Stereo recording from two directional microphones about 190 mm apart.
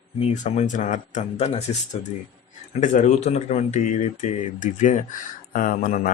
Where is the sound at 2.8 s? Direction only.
40° left (ahead or behind).